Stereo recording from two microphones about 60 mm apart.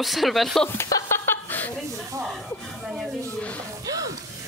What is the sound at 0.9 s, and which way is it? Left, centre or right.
Chuckle, left.